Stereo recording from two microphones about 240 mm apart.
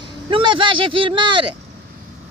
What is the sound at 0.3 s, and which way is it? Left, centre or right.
Speech, right.